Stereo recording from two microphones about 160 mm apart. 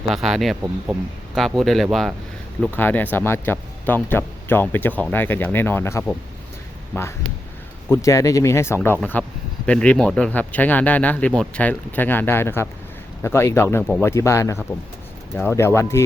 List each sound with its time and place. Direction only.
0.1 s speech: centre (ahead or behind)
2.6 s speech: 10° left (ahead or behind)
7.9 s speech: 20° left (ahead or behind)